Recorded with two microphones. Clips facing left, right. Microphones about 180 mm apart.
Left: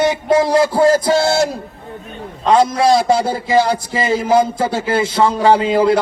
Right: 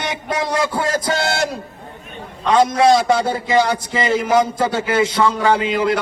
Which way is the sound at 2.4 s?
25° left (ahead or behind).